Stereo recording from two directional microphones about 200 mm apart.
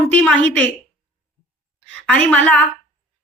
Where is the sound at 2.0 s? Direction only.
5° left (ahead or behind).